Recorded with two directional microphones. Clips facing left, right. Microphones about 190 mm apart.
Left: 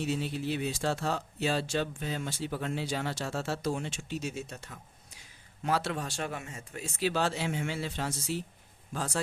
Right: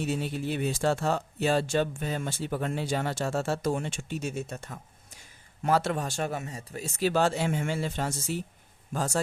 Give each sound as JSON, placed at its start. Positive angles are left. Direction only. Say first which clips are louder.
{"t": 0.0, "sound": "speech", "louder": "right 2 dB", "side_deg": -50}